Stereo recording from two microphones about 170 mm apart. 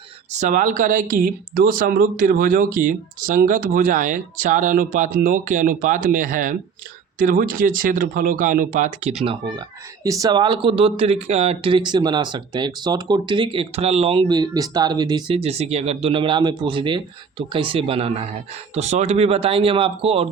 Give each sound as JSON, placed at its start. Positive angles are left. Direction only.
{"t": 0.3, "sound": "speech", "side_deg": -50}
{"t": 9.2, "sound": "speech", "side_deg": -30}
{"t": 10.0, "sound": "speech", "side_deg": -20}